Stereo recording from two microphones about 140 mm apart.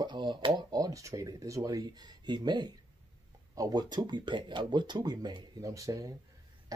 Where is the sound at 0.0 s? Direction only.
35° right (ahead or behind).